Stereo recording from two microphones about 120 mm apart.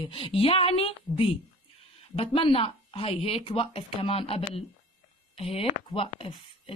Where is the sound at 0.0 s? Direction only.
45° left (ahead or behind).